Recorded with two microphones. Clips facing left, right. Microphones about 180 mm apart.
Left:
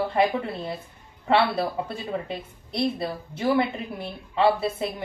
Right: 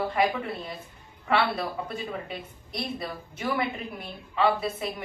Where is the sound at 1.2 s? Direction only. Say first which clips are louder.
Left 4 dB; 30° left (ahead or behind).